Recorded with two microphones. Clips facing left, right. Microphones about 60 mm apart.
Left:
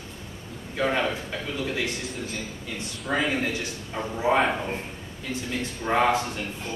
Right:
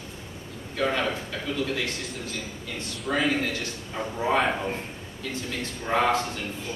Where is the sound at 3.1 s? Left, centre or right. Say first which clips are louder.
Even; centre.